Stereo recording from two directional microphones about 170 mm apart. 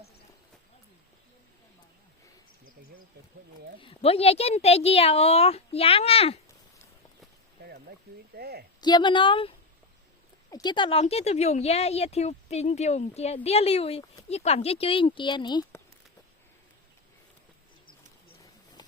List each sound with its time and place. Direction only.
3.8 s speech: 35° left (ahead or behind)
8.4 s a woman's voice: 70° right (ahead or behind)
8.8 s speech: 25° left (ahead or behind)